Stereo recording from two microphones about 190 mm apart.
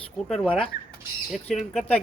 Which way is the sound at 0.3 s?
Centre (ahead or behind).